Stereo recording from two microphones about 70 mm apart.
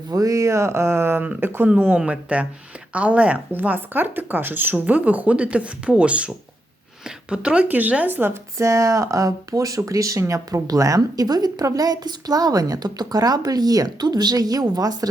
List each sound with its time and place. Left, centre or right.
0.1 s speech: right
2.0 s speech: centre
8.3 s speech: right